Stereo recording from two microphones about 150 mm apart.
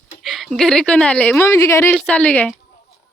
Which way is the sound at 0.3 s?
Centre (ahead or behind).